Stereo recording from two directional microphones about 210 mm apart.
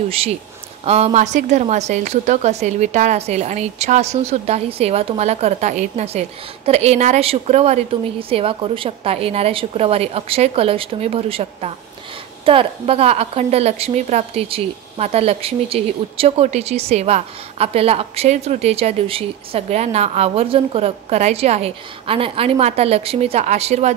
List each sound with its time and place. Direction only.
0.8 s a woman's voice: 30° right (ahead or behind)